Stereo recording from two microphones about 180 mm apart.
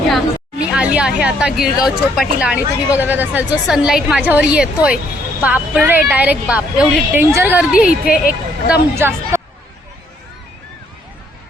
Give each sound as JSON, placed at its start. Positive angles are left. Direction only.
{"t": 0.7, "sound": "speech", "side_deg": -5}
{"t": 8.0, "sound": "speech", "side_deg": 55}
{"t": 8.7, "sound": "speech", "side_deg": -15}